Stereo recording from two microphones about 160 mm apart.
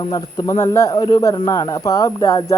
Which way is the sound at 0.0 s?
25° left (ahead or behind).